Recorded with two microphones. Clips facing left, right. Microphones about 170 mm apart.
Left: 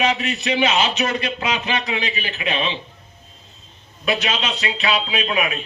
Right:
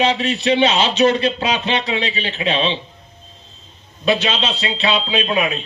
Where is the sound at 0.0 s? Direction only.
30° right (ahead or behind).